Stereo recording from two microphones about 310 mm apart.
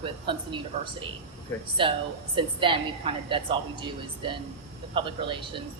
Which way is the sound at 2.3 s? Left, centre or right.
Centre.